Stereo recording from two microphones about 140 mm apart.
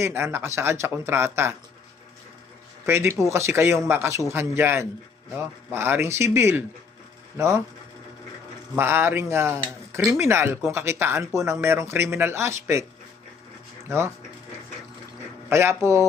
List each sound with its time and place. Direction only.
0.0 s speech: 15° right (ahead or behind)
2.8 s speech: 20° right (ahead or behind)
8.7 s speech: 15° right (ahead or behind)
13.8 s speech: 20° right (ahead or behind)
15.4 s speech: 15° right (ahead or behind)